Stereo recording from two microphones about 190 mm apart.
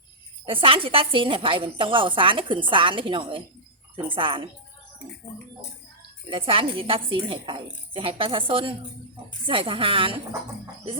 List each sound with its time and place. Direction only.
0.4 s a woman's voice: 30° right (ahead or behind)
6.3 s a woman's voice: 30° right (ahead or behind)